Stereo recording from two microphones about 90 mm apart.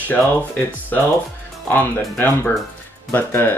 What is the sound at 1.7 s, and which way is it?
Speech, 20° left (ahead or behind).